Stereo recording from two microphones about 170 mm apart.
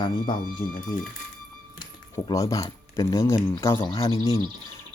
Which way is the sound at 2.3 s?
20° left (ahead or behind).